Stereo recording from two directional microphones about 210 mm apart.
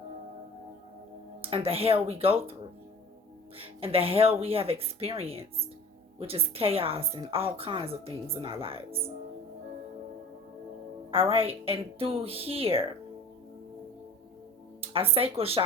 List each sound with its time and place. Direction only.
1.4 s a woman's voice: 25° right (ahead or behind)
3.6 s a woman's voice: 25° right (ahead or behind)
11.1 s a woman's voice: 25° right (ahead or behind)
14.8 s speech: 25° right (ahead or behind)